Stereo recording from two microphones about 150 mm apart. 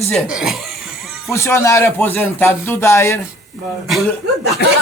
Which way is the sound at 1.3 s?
20° left (ahead or behind).